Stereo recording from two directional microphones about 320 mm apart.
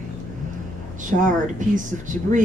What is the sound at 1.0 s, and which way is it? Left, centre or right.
Speech, right.